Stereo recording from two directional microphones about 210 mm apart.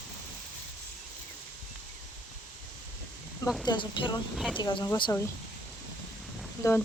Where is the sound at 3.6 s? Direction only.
20° left (ahead or behind).